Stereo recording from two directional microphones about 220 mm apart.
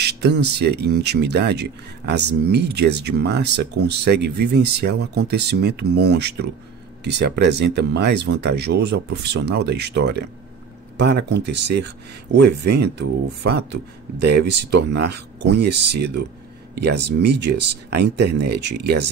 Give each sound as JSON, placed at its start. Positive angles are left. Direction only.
{"t": 0.0, "sound": "speech", "side_deg": -50}